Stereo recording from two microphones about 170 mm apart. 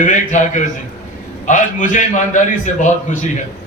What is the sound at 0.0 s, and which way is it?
A man's voice, 45° left (ahead or behind).